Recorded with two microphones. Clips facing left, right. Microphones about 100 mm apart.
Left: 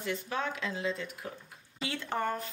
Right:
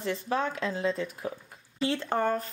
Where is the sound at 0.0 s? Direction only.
30° right (ahead or behind).